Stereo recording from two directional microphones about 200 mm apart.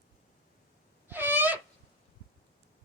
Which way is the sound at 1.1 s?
10° right (ahead or behind).